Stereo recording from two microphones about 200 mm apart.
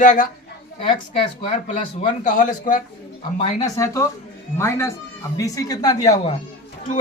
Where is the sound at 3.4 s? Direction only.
20° left (ahead or behind).